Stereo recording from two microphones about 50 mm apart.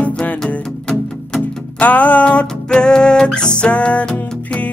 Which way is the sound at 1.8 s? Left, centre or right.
Left.